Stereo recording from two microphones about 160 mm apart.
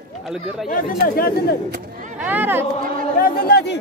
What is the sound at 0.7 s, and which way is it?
Speech, 70° left (ahead or behind).